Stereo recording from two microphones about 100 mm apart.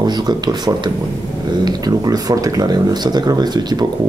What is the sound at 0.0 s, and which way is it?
Speech, 45° right (ahead or behind).